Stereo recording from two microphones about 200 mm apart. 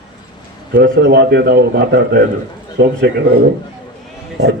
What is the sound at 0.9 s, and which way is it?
A man's voice, 55° right (ahead or behind).